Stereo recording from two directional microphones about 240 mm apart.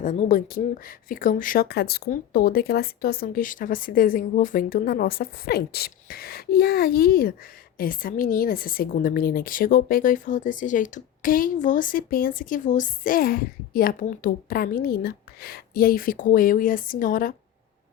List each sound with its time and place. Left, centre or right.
0.0 s a woman's voice: left